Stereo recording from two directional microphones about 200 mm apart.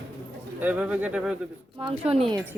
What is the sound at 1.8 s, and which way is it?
Speech, 25° right (ahead or behind).